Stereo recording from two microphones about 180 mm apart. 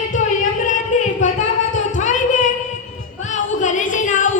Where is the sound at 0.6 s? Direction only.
45° left (ahead or behind).